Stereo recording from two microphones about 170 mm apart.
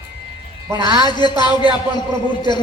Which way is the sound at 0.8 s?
25° left (ahead or behind).